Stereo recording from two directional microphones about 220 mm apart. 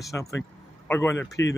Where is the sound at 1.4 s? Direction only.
55° left (ahead or behind).